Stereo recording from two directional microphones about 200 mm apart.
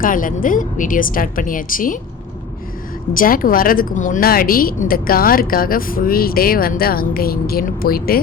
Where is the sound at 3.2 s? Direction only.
45° left (ahead or behind).